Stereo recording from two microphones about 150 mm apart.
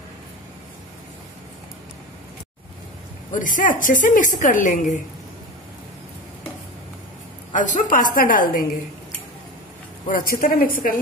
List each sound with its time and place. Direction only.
3.3 s speech: 60° left (ahead or behind)
7.5 s speech: 60° left (ahead or behind)
10.0 s a woman's voice: 70° left (ahead or behind)